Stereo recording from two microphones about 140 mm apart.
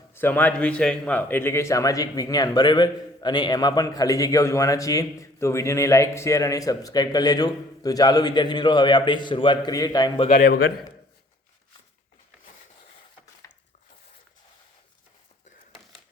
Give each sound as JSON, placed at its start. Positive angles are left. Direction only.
{"t": 0.1, "sound": "speech", "side_deg": 15}
{"t": 10.2, "sound": "a man's voice", "side_deg": 65}
{"t": 13.4, "sound": "a sound", "side_deg": 20}